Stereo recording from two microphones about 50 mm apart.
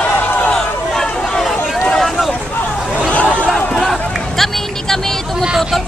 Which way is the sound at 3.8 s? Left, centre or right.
Centre.